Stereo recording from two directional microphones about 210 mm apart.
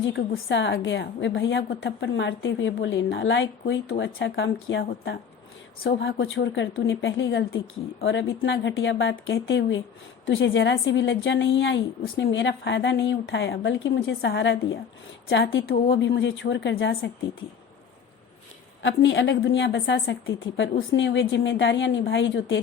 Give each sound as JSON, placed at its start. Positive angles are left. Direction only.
{"t": 0.0, "sound": "a woman's voice", "side_deg": 60}
{"t": 18.8, "sound": "a woman's voice", "side_deg": 60}